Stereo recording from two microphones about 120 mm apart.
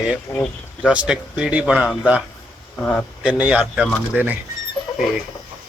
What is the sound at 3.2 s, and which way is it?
Speech, 10° right (ahead or behind).